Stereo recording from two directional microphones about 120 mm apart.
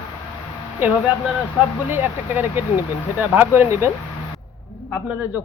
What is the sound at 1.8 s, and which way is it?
A woman's voice, 15° right (ahead or behind).